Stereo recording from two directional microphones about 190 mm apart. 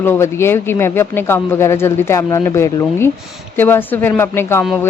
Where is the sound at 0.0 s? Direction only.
15° left (ahead or behind).